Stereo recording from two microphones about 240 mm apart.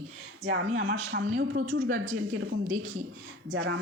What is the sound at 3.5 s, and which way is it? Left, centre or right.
Speech, right.